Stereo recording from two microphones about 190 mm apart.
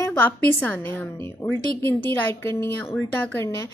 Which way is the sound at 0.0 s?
10° left (ahead or behind).